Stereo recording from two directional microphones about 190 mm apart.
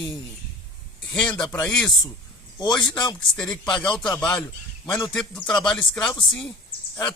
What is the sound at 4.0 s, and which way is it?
Speech, 5° left (ahead or behind).